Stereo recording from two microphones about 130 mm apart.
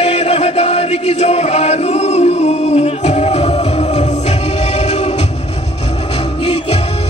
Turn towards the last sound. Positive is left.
turn(degrees=50)  # may be behind; listen again after turning